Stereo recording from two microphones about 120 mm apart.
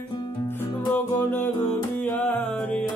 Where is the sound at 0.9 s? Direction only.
15° left (ahead or behind).